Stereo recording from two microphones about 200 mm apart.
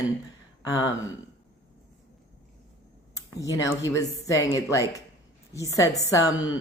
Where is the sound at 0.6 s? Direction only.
20° left (ahead or behind).